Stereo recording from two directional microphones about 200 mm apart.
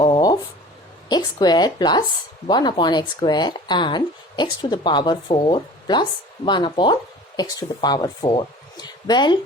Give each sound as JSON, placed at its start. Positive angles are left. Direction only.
{"t": 1.0, "sound": "speech", "side_deg": 20}